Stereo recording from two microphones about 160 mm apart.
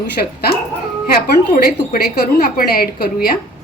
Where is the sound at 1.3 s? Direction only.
70° left (ahead or behind).